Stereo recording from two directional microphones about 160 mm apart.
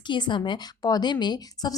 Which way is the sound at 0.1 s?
30° left (ahead or behind).